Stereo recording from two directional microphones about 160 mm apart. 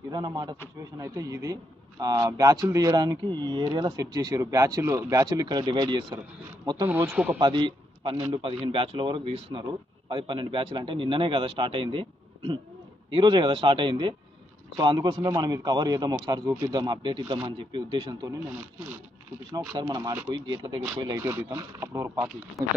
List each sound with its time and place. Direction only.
0.1 s a man's voice: 25° right (ahead or behind)
6.9 s speech: 15° right (ahead or behind)
7.3 s a man's voice: 30° right (ahead or behind)
17.5 s speech: 30° right (ahead or behind)
19.5 s a man's voice: 25° right (ahead or behind)